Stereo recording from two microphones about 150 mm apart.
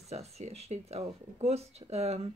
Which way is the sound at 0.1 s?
45° right (ahead or behind).